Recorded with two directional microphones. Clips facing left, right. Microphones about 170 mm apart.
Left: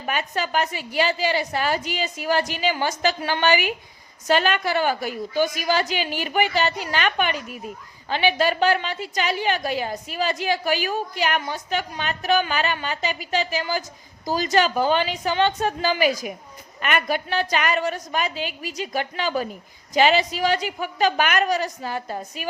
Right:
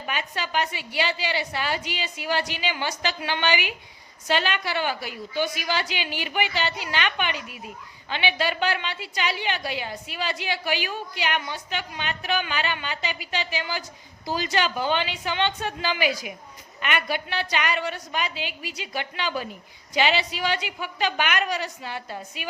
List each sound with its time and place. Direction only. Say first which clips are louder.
0.0 s a woman's voice: left 5 dB; 45° left (ahead or behind)